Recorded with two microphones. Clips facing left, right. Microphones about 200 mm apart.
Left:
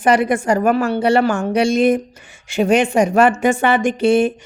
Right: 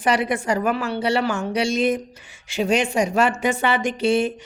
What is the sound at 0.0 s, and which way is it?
A woman's voice, 50° left (ahead or behind).